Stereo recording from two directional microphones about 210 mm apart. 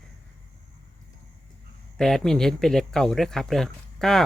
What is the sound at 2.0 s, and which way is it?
Speech, centre (ahead or behind).